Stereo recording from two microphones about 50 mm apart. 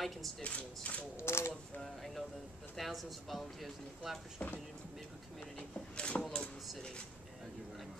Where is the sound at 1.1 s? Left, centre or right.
Left.